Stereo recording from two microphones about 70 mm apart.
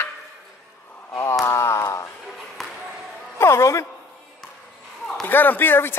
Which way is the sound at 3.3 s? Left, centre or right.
Left.